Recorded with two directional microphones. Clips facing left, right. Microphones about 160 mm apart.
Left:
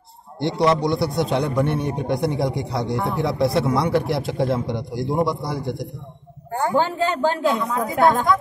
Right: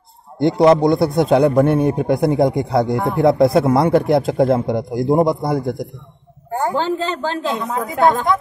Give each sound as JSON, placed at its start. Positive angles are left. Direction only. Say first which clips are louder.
{"t": 0.6, "sound": "speech", "louder": "right 7 dB", "side_deg": -50}
{"t": 6.7, "sound": "a man's voice", "louder": "left 2 dB", "side_deg": 10}
{"t": 7.5, "sound": "a woman's voice", "louder": "even", "side_deg": -20}